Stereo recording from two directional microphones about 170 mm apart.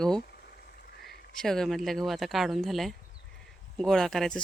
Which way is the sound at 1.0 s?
65° left (ahead or behind).